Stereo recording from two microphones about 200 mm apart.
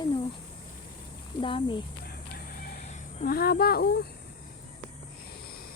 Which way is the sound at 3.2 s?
50° left (ahead or behind).